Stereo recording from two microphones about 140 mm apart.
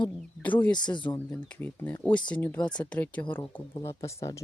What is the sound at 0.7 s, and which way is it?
Speech, 30° left (ahead or behind).